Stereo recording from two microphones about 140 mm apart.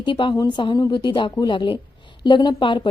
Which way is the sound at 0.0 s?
35° left (ahead or behind).